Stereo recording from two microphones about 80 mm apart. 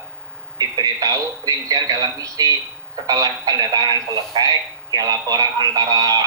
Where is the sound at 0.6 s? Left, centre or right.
Right.